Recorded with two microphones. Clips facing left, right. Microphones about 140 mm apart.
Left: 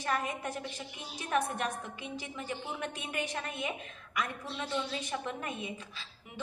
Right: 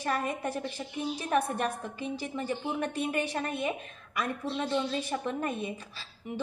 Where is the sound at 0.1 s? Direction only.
40° right (ahead or behind).